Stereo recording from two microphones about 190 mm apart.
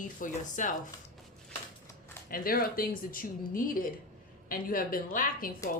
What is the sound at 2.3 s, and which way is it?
A woman's voice, 50° left (ahead or behind).